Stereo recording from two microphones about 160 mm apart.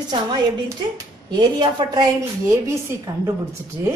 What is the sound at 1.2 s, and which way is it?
A woman's voice, 25° right (ahead or behind).